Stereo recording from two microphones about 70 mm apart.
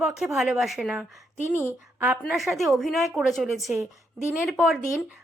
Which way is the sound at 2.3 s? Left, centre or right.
Centre.